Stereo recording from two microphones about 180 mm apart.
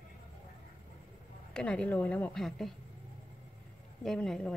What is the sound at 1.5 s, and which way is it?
A woman's voice, 5° left (ahead or behind).